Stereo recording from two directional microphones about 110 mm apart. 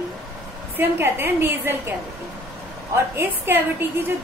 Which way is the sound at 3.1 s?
20° right (ahead or behind).